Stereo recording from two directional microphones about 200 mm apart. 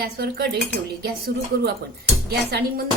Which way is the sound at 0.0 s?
50° right (ahead or behind).